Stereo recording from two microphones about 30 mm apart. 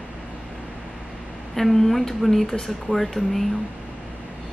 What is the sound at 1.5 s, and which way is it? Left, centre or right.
Speech, centre.